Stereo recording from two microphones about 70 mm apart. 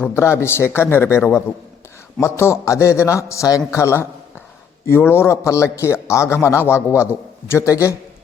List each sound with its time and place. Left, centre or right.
0.2 s a man's voice: left